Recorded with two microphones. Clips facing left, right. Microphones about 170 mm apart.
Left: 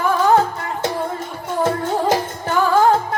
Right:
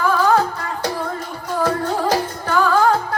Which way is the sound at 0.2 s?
25° left (ahead or behind).